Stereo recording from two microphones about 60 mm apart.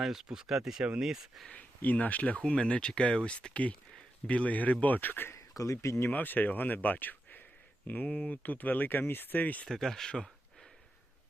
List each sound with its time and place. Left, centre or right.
0.0 s speech: centre
1.5 s speech: left
5.3 s speech: left
6.1 s speech: left
9.6 s speech: centre